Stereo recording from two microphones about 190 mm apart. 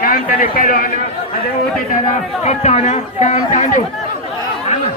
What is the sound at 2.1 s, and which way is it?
Speech, 35° left (ahead or behind).